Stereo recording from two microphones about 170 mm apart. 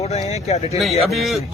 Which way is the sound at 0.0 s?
40° left (ahead or behind).